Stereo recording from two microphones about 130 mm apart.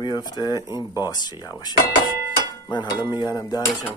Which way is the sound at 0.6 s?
25° right (ahead or behind).